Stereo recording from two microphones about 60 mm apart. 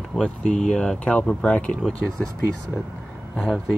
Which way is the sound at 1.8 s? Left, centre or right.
Centre.